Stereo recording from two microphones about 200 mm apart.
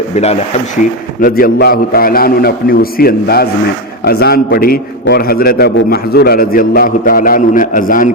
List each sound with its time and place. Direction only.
1.2 s a man's voice: 50° left (ahead or behind)